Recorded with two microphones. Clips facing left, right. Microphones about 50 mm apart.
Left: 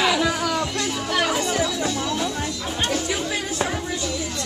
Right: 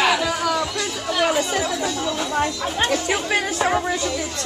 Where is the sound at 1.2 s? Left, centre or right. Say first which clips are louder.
Right 2 dB; right.